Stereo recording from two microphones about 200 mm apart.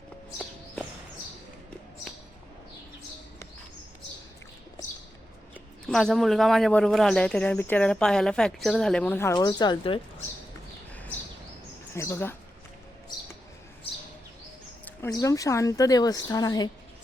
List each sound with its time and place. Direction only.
5.8 s speech: centre (ahead or behind); by 10.2 s 25° left (ahead or behind)
11.9 s a woman's voice: 15° left (ahead or behind)
15.0 s a woman's voice: 15° left (ahead or behind)